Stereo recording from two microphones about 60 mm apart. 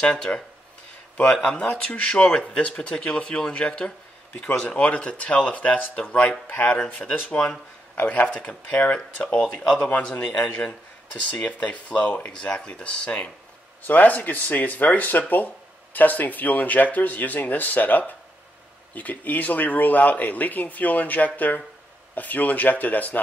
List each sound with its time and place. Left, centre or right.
0.0 s speech: centre
1.4 s speech: centre
4.6 s speech: centre
7.9 s a man's voice: left